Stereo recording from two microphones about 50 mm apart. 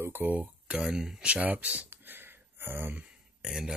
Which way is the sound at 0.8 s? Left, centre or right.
Centre.